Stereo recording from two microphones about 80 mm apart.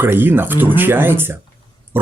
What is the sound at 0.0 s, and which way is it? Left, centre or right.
Speech, right.